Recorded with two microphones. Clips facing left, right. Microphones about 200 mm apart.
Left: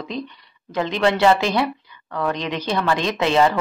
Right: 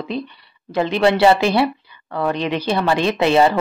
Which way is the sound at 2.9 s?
10° right (ahead or behind).